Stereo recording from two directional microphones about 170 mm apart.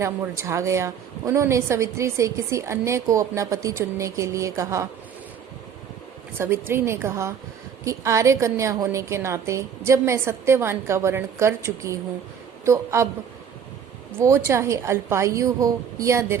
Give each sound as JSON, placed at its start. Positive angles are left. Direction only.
{"t": 0.0, "sound": "a woman's voice", "side_deg": -15}
{"t": 6.4, "sound": "a woman's voice", "side_deg": -15}
{"t": 14.2, "sound": "a woman's voice", "side_deg": -15}